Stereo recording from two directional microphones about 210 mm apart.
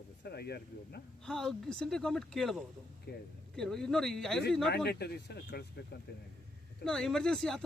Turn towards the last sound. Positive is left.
turn(degrees=0)  # may be behind; listen again after turning